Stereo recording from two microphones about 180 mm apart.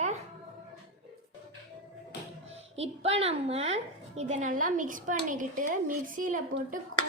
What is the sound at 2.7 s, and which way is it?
A woman's voice, 35° right (ahead or behind).